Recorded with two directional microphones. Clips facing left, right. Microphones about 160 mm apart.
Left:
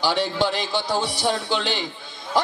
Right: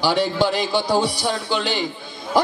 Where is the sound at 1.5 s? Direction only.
10° right (ahead or behind).